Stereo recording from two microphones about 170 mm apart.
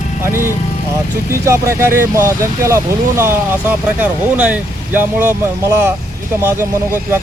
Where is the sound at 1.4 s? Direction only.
15° right (ahead or behind).